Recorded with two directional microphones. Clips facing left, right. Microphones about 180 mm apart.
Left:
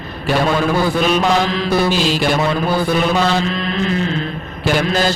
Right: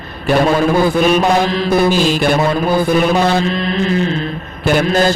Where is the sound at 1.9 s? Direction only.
50° right (ahead or behind).